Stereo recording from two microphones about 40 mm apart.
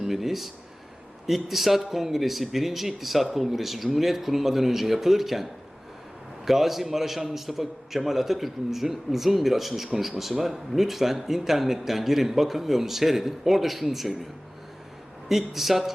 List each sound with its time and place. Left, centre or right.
0.0 s a man's voice: centre
15.3 s a man's voice: centre